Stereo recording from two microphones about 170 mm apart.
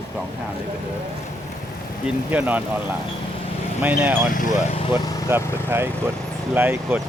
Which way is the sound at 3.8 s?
10° right (ahead or behind).